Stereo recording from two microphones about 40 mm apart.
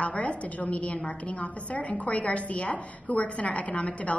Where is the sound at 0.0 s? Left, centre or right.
Left.